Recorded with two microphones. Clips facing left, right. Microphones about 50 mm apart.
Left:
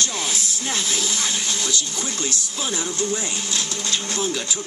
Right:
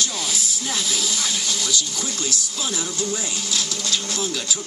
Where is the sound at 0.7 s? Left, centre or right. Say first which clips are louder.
Left 1 dB; left.